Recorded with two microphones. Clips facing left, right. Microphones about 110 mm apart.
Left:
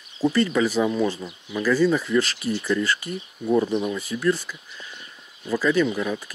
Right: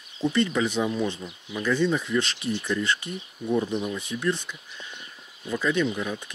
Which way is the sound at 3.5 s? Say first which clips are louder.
Left 4 dB; 90° left.